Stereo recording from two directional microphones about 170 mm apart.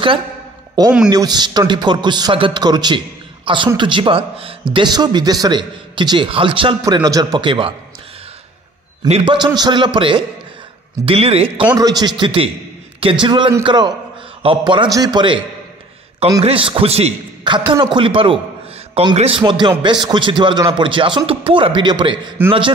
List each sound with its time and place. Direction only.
0.8 s speech: 25° right (ahead or behind)
9.2 s a man's voice: 25° right (ahead or behind)
11.7 s a man's voice: 25° right (ahead or behind)
16.4 s a man's voice: 30° right (ahead or behind)